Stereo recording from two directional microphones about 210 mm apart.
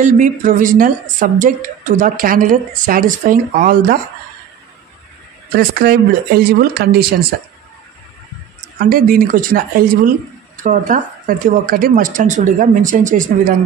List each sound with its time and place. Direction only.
0.0 s a woman's voice: 35° right (ahead or behind)
5.5 s speech: 45° right (ahead or behind)
8.7 s a woman's voice: 45° right (ahead or behind)